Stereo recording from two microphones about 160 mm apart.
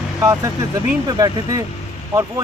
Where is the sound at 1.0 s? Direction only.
25° right (ahead or behind).